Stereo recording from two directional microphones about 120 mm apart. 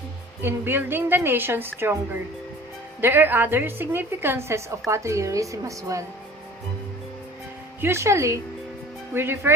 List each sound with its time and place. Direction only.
0.4 s a woman's voice: 20° right (ahead or behind)
3.0 s a woman's voice: 15° right (ahead or behind)
7.8 s a woman's voice: 20° right (ahead or behind)